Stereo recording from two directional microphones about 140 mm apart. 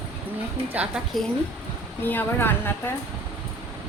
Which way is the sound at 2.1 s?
15° left (ahead or behind).